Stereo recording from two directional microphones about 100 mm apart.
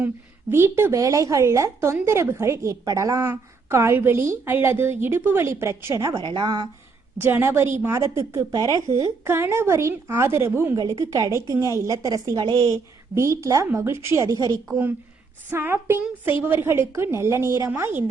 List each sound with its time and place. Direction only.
0.5 s a woman's voice: 25° right (ahead or behind)
6.1 s speech: 50° right (ahead or behind)
7.2 s a woman's voice: 25° right (ahead or behind)
10.8 s a woman's voice: 35° right (ahead or behind)
15.4 s a woman's voice: 20° right (ahead or behind)